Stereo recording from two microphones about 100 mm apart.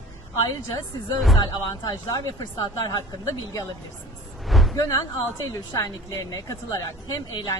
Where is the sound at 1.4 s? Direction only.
45° left (ahead or behind).